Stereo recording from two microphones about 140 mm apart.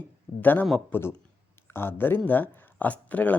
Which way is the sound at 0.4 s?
15° left (ahead or behind).